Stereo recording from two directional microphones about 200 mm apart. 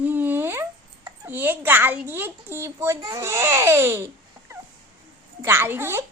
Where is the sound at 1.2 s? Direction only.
10° right (ahead or behind).